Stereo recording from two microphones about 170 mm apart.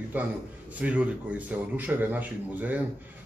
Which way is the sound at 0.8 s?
10° right (ahead or behind).